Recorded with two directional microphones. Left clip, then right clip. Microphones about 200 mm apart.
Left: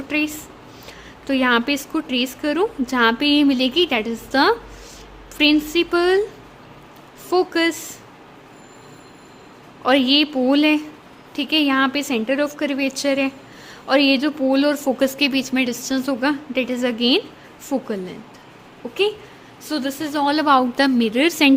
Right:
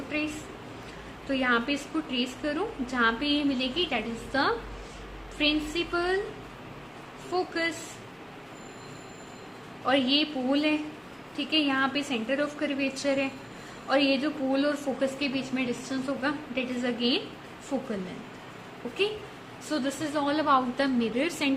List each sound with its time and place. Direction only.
0.1 s a woman's voice: 55° left (ahead or behind)
1.3 s a woman's voice: 50° left (ahead or behind)
7.3 s a woman's voice: 55° left (ahead or behind)
9.8 s a woman's voice: 55° left (ahead or behind)
19.7 s a woman's voice: 50° left (ahead or behind)